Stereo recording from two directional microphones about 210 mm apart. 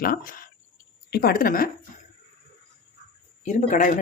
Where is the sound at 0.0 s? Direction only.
40° left (ahead or behind).